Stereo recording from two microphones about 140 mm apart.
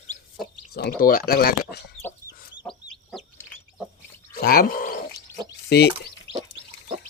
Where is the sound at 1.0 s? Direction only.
90° left.